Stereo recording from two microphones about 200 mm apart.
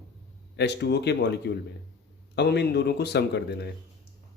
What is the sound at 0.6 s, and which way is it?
Speech, 55° left (ahead or behind).